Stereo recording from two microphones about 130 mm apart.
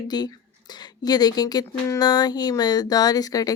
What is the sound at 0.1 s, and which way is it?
Speech, 30° left (ahead or behind).